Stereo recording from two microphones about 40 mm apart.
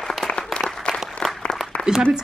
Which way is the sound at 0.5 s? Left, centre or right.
Centre.